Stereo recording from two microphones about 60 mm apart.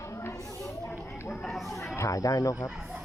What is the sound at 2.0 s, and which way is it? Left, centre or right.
Speech, left.